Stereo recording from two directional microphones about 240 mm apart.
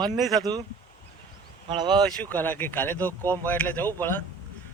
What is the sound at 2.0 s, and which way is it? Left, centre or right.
Speech, centre.